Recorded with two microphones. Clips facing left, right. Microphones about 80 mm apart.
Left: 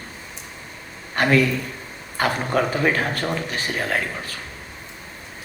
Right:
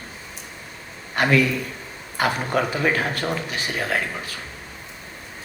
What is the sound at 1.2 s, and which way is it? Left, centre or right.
Speech, left.